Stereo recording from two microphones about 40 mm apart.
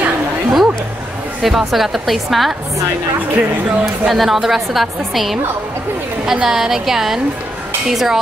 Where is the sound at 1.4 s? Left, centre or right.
Centre.